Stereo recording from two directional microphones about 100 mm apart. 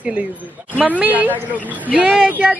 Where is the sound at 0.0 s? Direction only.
15° right (ahead or behind).